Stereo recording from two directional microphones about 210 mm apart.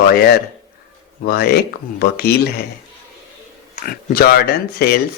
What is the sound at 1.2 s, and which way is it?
Speech, 45° left (ahead or behind).